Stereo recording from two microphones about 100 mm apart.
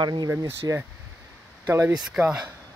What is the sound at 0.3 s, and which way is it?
Speech, 30° right (ahead or behind).